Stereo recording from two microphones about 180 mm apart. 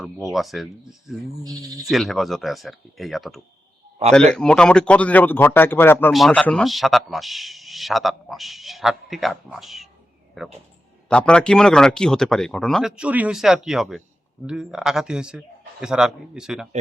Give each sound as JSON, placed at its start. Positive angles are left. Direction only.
{"t": 0.3, "sound": "speech", "side_deg": 0}
{"t": 1.5, "sound": "speech", "side_deg": -20}
{"t": 1.9, "sound": "speech", "side_deg": 0}
{"t": 6.1, "sound": "speech", "side_deg": 0}